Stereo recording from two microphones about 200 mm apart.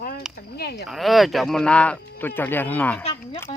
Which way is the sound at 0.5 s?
50° left (ahead or behind).